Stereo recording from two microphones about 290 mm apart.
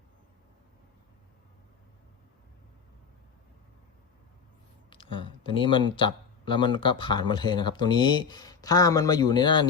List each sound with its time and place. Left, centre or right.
4.9 s speech: centre